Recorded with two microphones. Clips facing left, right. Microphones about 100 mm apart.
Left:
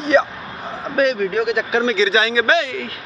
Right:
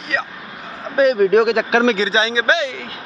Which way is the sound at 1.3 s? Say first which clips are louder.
Right 5 dB; 90° right.